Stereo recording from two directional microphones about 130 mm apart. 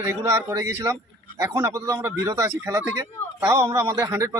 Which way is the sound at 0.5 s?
25° right (ahead or behind).